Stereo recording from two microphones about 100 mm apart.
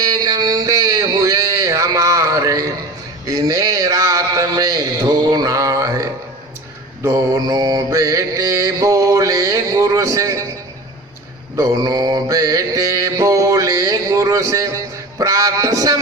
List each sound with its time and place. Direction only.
0.0 s a sound: 40° right (ahead or behind)
3.2 s a man's voice: 35° right (ahead or behind)
7.0 s mantra: 35° right (ahead or behind)
11.5 s mantra: 35° right (ahead or behind)
15.2 s music: 35° right (ahead or behind)